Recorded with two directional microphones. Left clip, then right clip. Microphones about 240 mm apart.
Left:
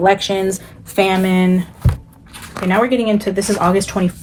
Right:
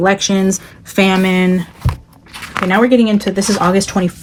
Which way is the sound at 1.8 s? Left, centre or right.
Right.